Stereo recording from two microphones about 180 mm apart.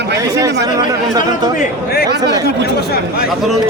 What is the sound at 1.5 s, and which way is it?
Speech, 60° left (ahead or behind).